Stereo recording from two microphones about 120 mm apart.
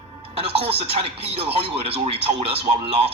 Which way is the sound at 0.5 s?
55° right (ahead or behind).